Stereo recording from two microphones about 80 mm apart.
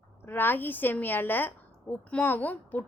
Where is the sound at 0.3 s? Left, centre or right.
Left.